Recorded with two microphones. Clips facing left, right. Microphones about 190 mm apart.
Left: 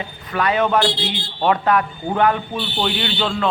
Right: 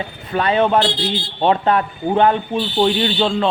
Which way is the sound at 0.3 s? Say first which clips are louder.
Right 2 dB; 30° right (ahead or behind).